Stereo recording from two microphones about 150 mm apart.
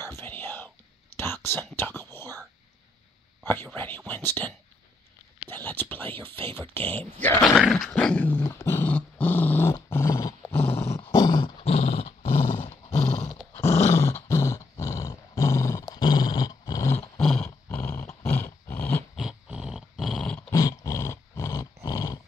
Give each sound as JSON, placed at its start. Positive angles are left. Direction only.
{"t": 0.1, "sound": "whispering", "side_deg": 15}
{"t": 3.4, "sound": "speech", "side_deg": 15}
{"t": 7.4, "sound": "dog", "side_deg": 0}
{"t": 11.1, "sound": "a sound", "side_deg": 25}
{"t": 11.6, "sound": "dog", "side_deg": 40}
{"t": 12.6, "sound": "roar", "side_deg": 45}
{"t": 14.2, "sound": "dog", "side_deg": 20}
{"t": 17.2, "sound": "roar", "side_deg": 5}
{"t": 17.6, "sound": "dog", "side_deg": 15}
{"t": 19.1, "sound": "dog", "side_deg": -5}
{"t": 20.5, "sound": "dog", "side_deg": 25}